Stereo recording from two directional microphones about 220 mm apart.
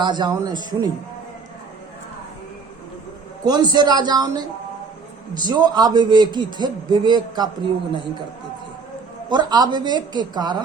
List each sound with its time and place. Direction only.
0.0 s a man's voice: 20° right (ahead or behind)
3.4 s a man's voice: 20° right (ahead or behind)
9.3 s a man's voice: 20° right (ahead or behind)